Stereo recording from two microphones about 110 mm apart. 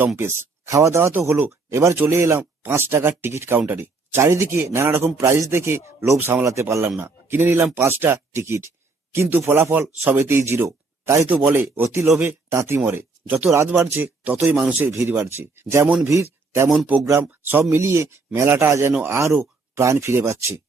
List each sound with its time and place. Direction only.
0.2 s speech: 25° right (ahead or behind)
16.6 s speech: 10° right (ahead or behind)
17.0 s speech: 25° right (ahead or behind)